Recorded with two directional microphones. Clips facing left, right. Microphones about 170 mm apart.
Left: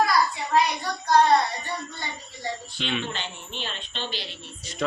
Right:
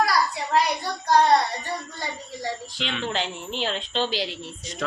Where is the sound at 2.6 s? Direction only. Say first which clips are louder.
Right 1 dB; 90° right.